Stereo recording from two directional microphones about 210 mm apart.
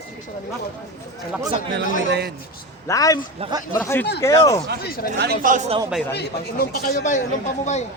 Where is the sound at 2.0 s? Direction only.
50° right (ahead or behind).